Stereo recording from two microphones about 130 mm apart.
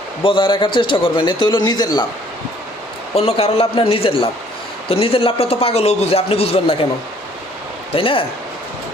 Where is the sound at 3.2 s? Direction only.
50° left (ahead or behind).